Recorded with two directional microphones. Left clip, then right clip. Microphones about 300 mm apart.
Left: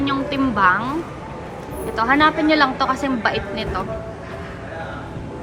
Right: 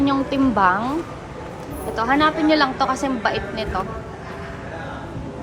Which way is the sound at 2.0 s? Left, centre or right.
Centre.